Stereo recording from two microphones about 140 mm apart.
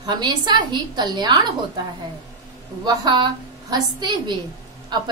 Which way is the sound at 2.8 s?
30° right (ahead or behind).